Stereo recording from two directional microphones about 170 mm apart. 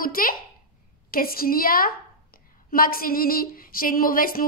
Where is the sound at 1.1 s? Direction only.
60° left (ahead or behind).